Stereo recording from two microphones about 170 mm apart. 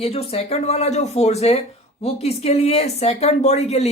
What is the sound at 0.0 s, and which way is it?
Speech, 35° left (ahead or behind).